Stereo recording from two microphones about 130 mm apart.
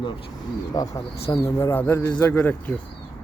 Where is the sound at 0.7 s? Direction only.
25° left (ahead or behind).